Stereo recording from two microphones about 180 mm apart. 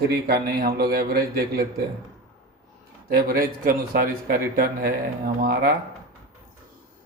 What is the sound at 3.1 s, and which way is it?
A man's voice, 55° right (ahead or behind).